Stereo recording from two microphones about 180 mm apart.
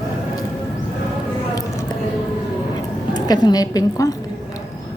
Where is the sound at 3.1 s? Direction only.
20° left (ahead or behind).